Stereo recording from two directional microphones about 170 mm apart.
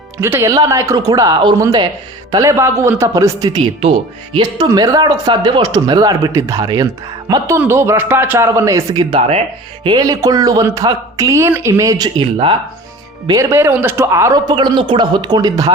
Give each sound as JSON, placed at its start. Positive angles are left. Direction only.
{"t": 0.2, "sound": "speech", "side_deg": -15}
{"t": 13.2, "sound": "speech", "side_deg": -20}